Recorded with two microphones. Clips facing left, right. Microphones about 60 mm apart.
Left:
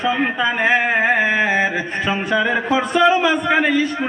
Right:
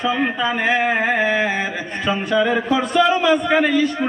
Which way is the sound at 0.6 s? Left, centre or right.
Left.